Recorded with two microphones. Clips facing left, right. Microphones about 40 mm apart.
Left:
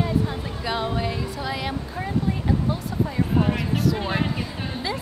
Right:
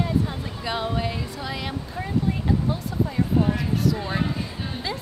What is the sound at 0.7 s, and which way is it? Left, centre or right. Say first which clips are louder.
A woman's voice: left 1 dB; centre.